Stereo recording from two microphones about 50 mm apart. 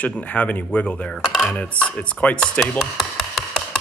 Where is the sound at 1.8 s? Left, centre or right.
Left.